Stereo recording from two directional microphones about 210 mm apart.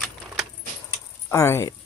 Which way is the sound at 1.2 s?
10° left (ahead or behind).